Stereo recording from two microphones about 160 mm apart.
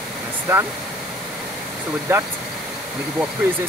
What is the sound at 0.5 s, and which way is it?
Speech, 15° right (ahead or behind).